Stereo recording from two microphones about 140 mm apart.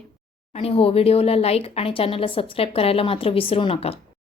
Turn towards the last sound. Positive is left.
turn(degrees=45)  # may be behind; listen again after turning